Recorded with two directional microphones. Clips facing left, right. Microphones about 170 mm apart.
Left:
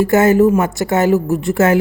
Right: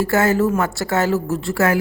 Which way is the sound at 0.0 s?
20° left (ahead or behind).